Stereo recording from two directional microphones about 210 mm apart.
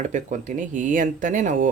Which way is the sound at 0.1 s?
35° right (ahead or behind).